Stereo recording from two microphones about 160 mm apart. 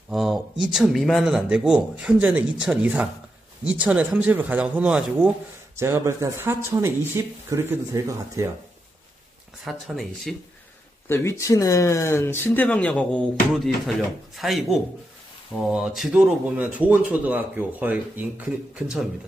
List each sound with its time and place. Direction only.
0.1 s speech: centre (ahead or behind); by 8.5 s 20° right (ahead or behind)
9.7 s speech: centre (ahead or behind)
11.1 s speech: 15° left (ahead or behind); by 19.0 s 5° right (ahead or behind)